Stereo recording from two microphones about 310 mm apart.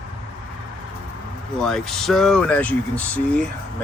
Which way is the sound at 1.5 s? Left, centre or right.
Centre.